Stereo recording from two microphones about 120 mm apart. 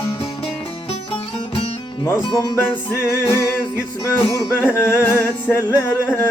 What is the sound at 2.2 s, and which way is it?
Music, 35° left (ahead or behind).